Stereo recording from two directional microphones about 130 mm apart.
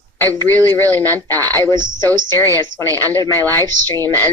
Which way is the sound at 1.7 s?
35° right (ahead or behind).